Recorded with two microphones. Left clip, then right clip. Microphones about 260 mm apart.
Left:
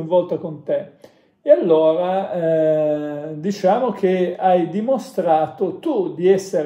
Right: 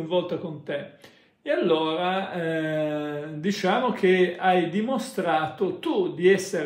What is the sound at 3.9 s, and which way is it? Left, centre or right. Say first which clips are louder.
Speech: left 2 dB; centre.